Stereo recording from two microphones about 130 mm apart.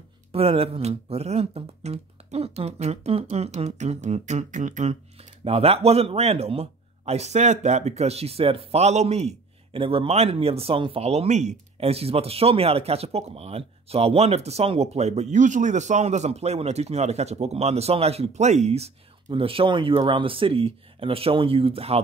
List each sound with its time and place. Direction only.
0.3 s speech: 50° right (ahead or behind); by 4.9 s 65° right (ahead or behind)
5.4 s speech: 50° right (ahead or behind)